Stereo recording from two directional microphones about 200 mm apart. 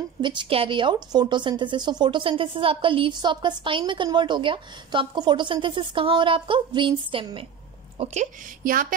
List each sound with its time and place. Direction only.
0.2 s a woman's voice: 25° right (ahead or behind); by 8.8 s 45° right (ahead or behind)